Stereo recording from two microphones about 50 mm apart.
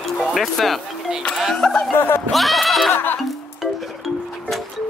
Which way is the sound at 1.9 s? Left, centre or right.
Left.